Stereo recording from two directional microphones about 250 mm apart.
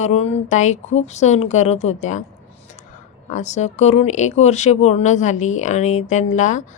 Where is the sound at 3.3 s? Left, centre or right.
Left.